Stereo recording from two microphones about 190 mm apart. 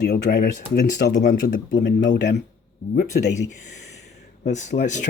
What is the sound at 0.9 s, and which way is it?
Speech, 45° left (ahead or behind).